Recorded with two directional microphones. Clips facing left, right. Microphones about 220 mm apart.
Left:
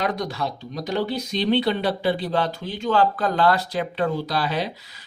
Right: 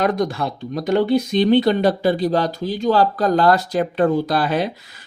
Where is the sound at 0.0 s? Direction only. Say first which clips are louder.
Right 6 dB; 50° right (ahead or behind).